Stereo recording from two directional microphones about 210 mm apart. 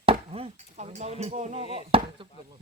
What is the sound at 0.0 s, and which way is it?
Speech, 25° right (ahead or behind).